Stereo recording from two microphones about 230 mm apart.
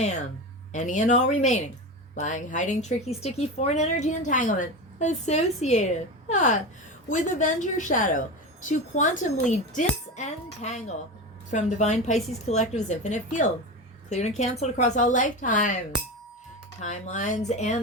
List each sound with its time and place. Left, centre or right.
0.7 s speech: left
16.8 s speech: left